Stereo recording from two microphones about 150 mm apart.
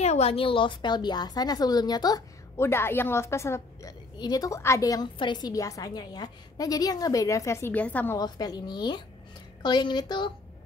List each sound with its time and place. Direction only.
0.0 s a woman's voice: 45° left (ahead or behind); by 8.2 s 10° left (ahead or behind)
8.2 s a woman's voice: 25° left (ahead or behind)